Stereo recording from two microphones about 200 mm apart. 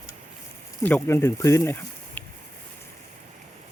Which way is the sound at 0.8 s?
10° left (ahead or behind).